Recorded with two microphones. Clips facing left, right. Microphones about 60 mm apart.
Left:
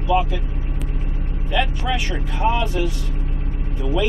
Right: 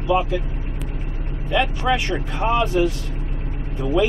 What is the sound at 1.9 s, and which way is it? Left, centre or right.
Speech, right.